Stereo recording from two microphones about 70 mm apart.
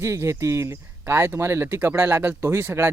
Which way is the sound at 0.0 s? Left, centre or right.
Right.